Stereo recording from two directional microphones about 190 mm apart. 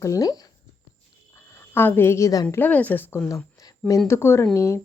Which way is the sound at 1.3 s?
10° left (ahead or behind).